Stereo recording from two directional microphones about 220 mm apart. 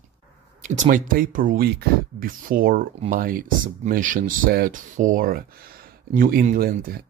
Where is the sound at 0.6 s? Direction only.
35° right (ahead or behind).